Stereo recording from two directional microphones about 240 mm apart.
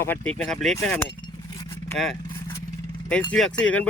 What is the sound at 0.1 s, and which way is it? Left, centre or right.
Speech, centre.